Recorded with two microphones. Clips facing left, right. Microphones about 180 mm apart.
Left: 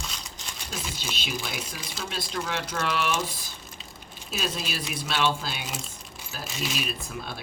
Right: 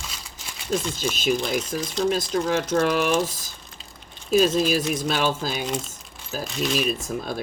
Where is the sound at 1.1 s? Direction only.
45° right (ahead or behind).